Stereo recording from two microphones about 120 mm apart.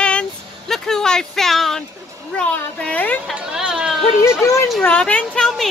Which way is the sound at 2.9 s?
15° left (ahead or behind).